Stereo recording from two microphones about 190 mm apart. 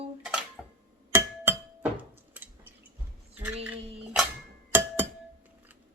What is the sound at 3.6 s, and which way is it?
Cutlery, 5° right (ahead or behind).